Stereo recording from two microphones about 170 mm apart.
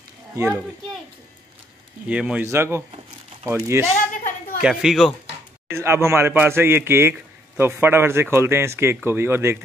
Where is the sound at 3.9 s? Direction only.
55° left (ahead or behind).